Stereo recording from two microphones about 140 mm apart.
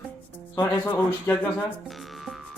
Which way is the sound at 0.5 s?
15° left (ahead or behind).